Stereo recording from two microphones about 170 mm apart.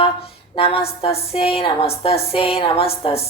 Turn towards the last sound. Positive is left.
turn(degrees=35)  # may be behind; listen again after turning